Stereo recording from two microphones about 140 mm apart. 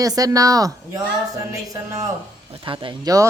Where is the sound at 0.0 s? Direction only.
25° right (ahead or behind).